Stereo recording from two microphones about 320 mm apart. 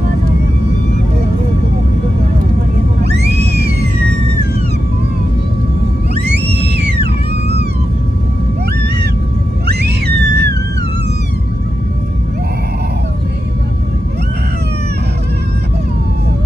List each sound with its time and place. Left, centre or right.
3.1 s music: right
6.3 s music: right
9.7 s a sound: right